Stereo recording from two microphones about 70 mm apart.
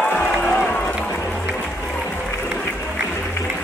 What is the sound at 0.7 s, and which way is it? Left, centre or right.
Run, left.